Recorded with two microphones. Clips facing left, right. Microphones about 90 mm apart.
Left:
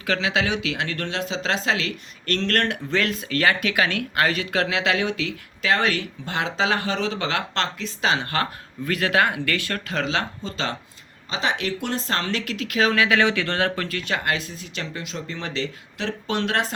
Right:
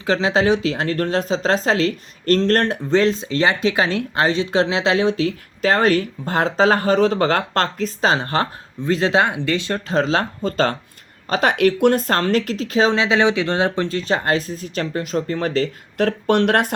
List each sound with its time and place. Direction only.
0.0 s speech: 30° right (ahead or behind); by 16.7 s 55° right (ahead or behind)